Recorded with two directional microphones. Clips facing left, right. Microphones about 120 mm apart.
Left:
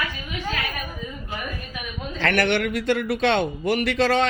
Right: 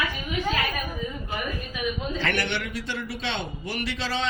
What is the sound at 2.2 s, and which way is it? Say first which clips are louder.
Speech: left 11 dB; 55° left (ahead or behind).